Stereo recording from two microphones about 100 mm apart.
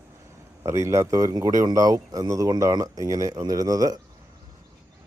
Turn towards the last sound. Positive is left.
turn(degrees=-35)  # may be behind; listen again after turning